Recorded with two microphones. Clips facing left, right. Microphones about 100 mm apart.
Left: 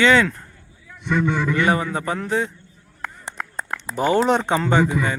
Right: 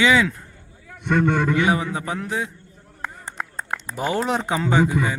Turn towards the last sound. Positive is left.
turn(degrees=-5)  # may be behind; listen again after turning